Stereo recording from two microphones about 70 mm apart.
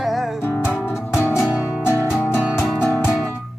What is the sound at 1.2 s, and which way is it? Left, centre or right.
Music, left.